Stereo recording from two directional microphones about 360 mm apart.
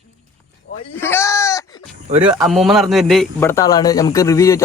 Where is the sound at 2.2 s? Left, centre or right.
Centre.